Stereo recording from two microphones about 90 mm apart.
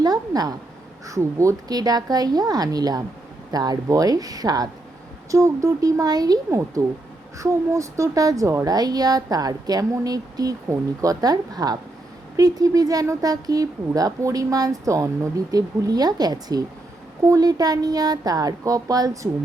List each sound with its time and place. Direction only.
0.0 s a woman's voice: 45° right (ahead or behind)
1.0 s speech: 35° right (ahead or behind)
5.3 s a woman's voice: 35° right (ahead or behind)
7.3 s a woman's voice: 35° right (ahead or behind)
8.7 s speech: 45° right (ahead or behind)